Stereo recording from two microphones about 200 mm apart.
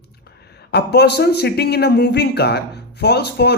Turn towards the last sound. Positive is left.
turn(degrees=55)  # may be behind; listen again after turning